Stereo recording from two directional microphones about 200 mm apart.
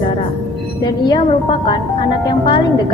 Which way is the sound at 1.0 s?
25° left (ahead or behind).